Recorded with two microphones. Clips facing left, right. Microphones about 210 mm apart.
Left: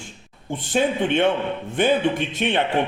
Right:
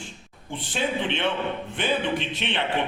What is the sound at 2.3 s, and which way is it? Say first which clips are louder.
Speech: left 7 dB; 50° left (ahead or behind).